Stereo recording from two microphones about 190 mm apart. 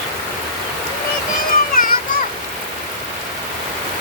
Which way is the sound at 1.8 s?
50° left (ahead or behind).